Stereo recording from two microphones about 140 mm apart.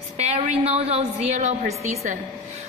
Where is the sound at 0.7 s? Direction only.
45° right (ahead or behind).